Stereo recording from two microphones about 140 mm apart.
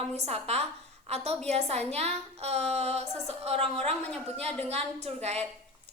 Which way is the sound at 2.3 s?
50° right (ahead or behind).